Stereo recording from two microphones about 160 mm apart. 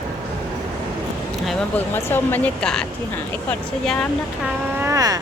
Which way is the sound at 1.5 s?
10° left (ahead or behind).